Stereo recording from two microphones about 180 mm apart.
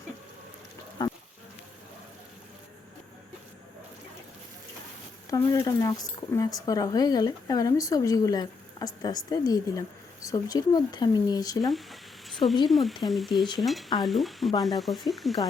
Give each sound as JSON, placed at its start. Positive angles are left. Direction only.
{"t": 1.0, "sound": "a sound", "side_deg": 25}
{"t": 5.3, "sound": "speech", "side_deg": 20}
{"t": 12.6, "sound": "speech", "side_deg": 0}